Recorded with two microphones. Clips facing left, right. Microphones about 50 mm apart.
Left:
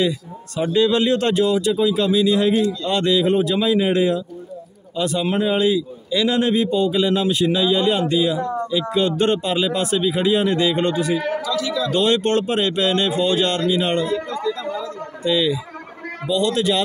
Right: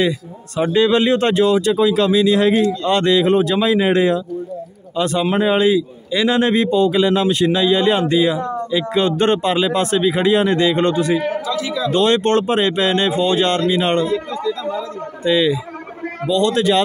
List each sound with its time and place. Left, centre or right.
0.6 s speech: right
1.4 s speech: right
6.5 s speech: right
11.1 s a man's voice: right
11.9 s speech: right
15.2 s speech: right